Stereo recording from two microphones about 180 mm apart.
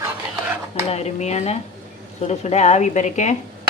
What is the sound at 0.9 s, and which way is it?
A woman's voice, 35° left (ahead or behind).